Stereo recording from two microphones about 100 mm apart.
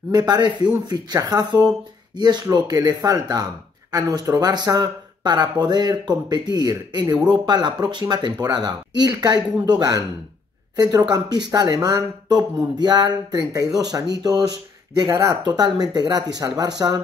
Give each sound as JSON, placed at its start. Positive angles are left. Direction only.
{"t": 0.1, "sound": "speech", "side_deg": -40}
{"t": 15.4, "sound": "speech", "side_deg": -45}